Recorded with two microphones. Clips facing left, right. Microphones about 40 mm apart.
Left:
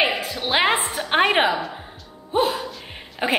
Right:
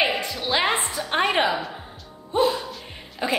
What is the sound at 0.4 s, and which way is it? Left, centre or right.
Music, left.